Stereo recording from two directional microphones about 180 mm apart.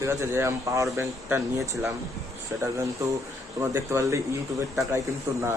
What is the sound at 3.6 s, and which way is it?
Speech, 15° right (ahead or behind).